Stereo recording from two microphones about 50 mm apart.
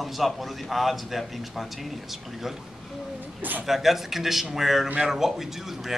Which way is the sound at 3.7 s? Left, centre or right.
Centre.